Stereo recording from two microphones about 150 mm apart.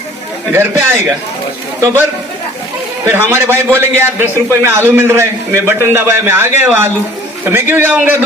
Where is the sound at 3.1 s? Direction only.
15° right (ahead or behind).